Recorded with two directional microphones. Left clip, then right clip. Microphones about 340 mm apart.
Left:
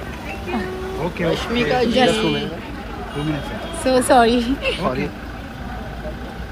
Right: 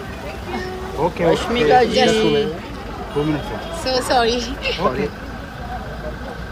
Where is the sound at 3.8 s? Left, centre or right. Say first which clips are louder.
Left 3 dB; centre.